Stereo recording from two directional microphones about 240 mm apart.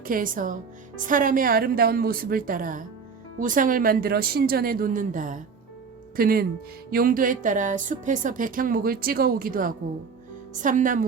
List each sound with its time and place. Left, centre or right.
0.0 s a woman's voice: right